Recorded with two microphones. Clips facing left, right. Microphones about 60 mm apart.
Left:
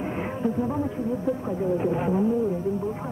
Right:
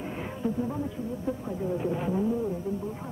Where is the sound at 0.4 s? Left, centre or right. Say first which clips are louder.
Left 4 dB; left.